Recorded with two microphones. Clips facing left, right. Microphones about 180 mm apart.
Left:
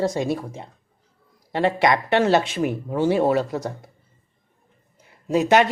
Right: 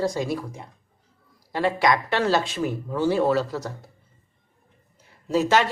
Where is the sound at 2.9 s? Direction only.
25° left (ahead or behind).